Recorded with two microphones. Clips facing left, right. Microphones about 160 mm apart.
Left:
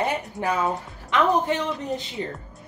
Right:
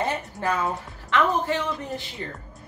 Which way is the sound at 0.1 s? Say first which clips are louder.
Left 1 dB; 15° left (ahead or behind).